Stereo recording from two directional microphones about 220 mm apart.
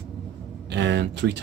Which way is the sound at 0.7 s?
50° right (ahead or behind).